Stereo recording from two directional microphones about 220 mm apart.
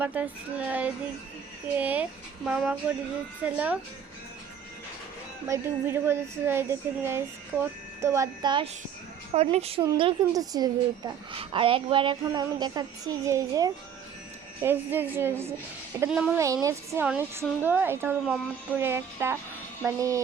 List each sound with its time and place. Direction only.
0.0 s a woman's voice: 5° right (ahead or behind)
5.5 s a woman's voice: 10° right (ahead or behind)